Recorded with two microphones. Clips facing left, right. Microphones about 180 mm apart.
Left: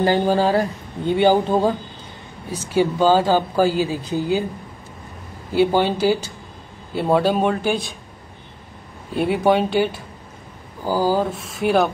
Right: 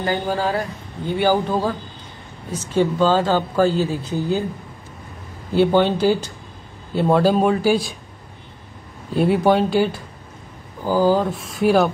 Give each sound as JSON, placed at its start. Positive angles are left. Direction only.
{"t": 0.0, "sound": "speech", "side_deg": 30}
{"t": 2.7, "sound": "speech", "side_deg": 15}
{"t": 5.5, "sound": "speech", "side_deg": 5}
{"t": 9.1, "sound": "speech", "side_deg": 0}